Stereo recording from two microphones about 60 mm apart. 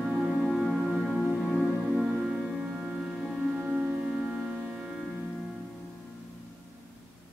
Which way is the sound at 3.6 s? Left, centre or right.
Right.